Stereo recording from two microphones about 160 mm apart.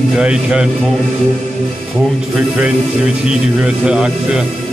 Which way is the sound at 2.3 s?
5° right (ahead or behind).